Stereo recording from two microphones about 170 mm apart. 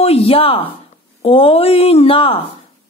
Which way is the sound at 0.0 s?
35° left (ahead or behind).